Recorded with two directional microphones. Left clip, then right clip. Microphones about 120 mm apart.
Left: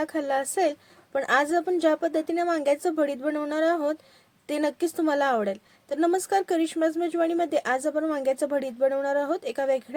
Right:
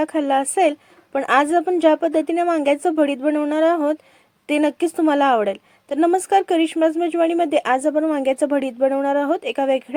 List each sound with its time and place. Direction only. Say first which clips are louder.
0.0 s a woman's voice: right 7 dB; 25° right (ahead or behind)
5.4 s a woman's voice: right 7 dB; 10° right (ahead or behind)
6.2 s a woman's voice: right 8 dB; 20° right (ahead or behind)
7.1 s a woman's voice: right 7 dB; 10° right (ahead or behind)
7.4 s a woman's voice: right 7 dB; 25° right (ahead or behind)